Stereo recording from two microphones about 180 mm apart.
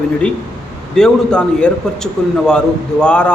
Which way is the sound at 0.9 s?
5° left (ahead or behind).